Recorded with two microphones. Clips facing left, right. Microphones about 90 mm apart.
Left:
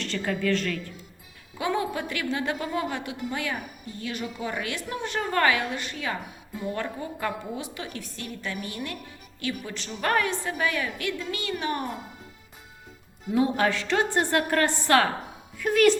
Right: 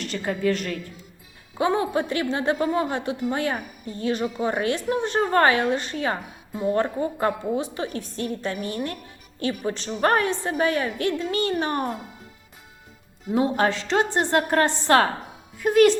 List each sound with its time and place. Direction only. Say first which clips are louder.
0.0 s a woman's voice: right 3 dB; 20° right (ahead or behind); by 11.9 s 40° right (ahead or behind)
13.3 s a woman's voice: right 2 dB; 25° right (ahead or behind)